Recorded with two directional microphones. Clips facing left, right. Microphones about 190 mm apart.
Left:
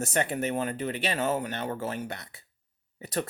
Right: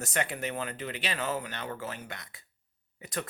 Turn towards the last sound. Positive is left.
turn(degrees=35)  # may be behind; listen again after turning